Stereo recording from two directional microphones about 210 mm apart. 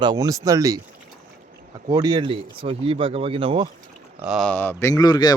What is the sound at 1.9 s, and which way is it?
Speech, 20° right (ahead or behind).